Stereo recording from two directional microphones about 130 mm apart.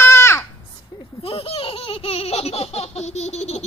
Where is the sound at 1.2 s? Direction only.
45° left (ahead or behind).